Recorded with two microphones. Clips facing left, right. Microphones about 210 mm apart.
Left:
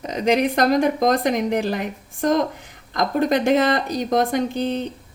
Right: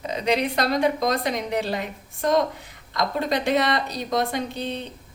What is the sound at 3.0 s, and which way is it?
Speech, 50° left (ahead or behind).